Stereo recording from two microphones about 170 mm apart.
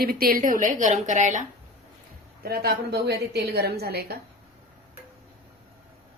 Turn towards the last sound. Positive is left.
turn(degrees=-65)  # may be behind; listen again after turning